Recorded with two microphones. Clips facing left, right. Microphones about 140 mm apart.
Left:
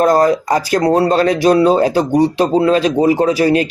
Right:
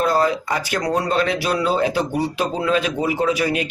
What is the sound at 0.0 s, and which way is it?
Speech, 45° left (ahead or behind).